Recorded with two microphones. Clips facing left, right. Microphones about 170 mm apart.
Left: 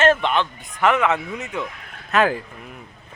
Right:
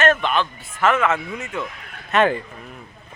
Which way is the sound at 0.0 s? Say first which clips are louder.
Left 1 dB; 25° left (ahead or behind).